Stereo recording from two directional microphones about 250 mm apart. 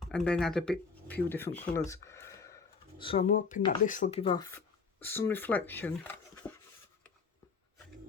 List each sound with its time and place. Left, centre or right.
0.0 s speech: centre
1.9 s a sound: centre
3.0 s speech: left
4.5 s speech: centre